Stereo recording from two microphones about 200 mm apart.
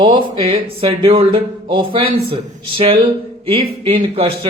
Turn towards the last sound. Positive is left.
turn(degrees=-30)  # may be behind; listen again after turning